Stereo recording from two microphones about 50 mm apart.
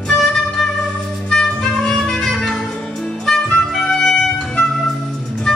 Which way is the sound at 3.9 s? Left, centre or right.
Centre.